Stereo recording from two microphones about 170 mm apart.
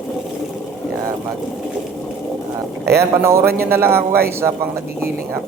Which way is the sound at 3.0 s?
15° right (ahead or behind).